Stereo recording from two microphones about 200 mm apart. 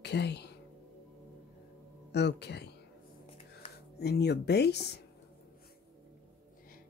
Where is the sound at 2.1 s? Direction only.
55° left (ahead or behind).